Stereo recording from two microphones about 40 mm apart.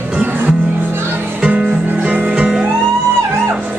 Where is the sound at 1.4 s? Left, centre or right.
Right.